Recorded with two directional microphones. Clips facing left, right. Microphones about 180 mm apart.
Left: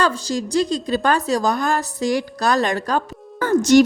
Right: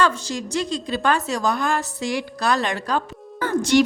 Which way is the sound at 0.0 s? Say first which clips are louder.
Left 1 dB; 35° left (ahead or behind).